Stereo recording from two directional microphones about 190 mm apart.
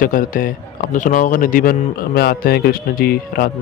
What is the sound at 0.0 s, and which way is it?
Speech, 45° left (ahead or behind).